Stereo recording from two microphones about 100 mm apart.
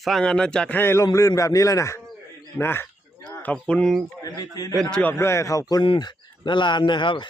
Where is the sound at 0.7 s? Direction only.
25° left (ahead or behind); by 4.0 s 10° left (ahead or behind).